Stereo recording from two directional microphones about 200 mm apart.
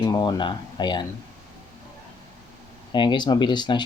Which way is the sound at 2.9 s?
20° left (ahead or behind).